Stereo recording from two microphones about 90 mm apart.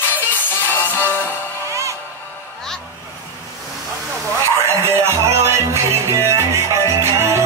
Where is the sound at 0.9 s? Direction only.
20° left (ahead or behind).